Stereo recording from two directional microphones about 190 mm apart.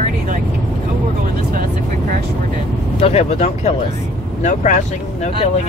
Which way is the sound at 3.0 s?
35° left (ahead or behind).